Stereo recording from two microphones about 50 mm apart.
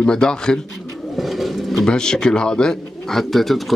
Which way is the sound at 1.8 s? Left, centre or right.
Centre.